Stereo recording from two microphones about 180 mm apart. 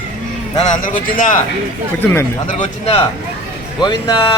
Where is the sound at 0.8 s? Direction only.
50° left (ahead or behind).